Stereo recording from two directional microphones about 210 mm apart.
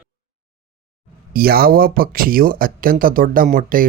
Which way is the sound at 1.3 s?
45° right (ahead or behind).